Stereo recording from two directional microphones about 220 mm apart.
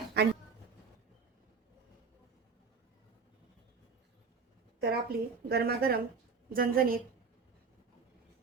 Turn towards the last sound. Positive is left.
turn(degrees=-40)  # may be behind; listen again after turning